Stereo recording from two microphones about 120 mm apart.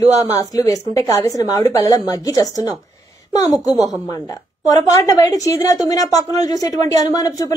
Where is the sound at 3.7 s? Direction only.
Centre (ahead or behind).